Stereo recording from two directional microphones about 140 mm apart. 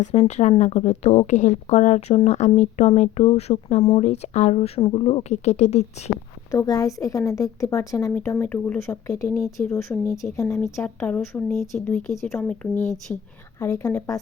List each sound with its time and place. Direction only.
0.0 s speech: 50° left (ahead or behind)
6.5 s a woman's voice: 25° left (ahead or behind)
10.8 s speech: 10° left (ahead or behind)
13.6 s a woman's voice: 20° left (ahead or behind)